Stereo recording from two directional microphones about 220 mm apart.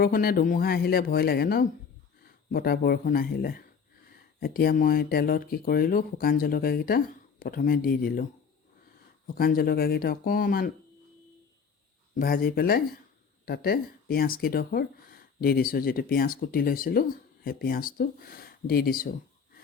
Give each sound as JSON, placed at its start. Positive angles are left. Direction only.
{"t": 0.0, "sound": "speech", "side_deg": 45}
{"t": 12.1, "sound": "speech", "side_deg": 40}